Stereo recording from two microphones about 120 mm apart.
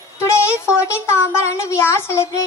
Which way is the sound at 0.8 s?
25° left (ahead or behind).